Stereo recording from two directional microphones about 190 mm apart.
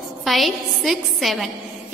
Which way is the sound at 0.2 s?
Centre (ahead or behind).